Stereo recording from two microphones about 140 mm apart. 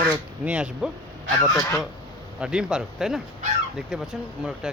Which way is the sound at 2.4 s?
5° right (ahead or behind).